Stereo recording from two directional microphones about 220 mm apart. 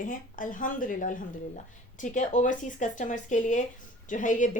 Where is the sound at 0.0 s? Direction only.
40° left (ahead or behind).